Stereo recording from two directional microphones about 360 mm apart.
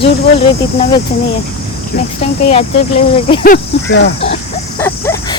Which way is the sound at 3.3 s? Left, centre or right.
Centre.